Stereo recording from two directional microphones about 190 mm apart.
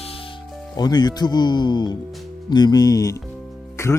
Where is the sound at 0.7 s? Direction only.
20° left (ahead or behind).